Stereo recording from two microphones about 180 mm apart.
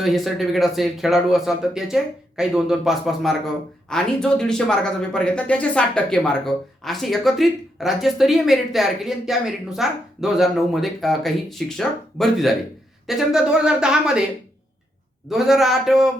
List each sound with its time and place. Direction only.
0.0 s speech: centre (ahead or behind)
15.3 s speech: centre (ahead or behind)